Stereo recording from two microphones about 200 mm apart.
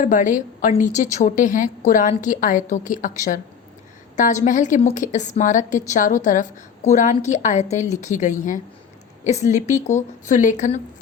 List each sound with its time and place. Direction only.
0.0 s a woman's voice: 40° left (ahead or behind)